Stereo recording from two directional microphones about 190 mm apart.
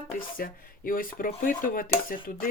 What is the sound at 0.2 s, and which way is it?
Speech, 50° left (ahead or behind).